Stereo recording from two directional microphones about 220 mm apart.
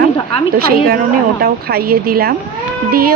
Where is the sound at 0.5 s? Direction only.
45° right (ahead or behind).